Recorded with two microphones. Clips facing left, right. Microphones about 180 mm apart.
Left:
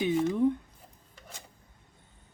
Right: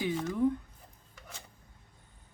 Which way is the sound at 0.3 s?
20° left (ahead or behind).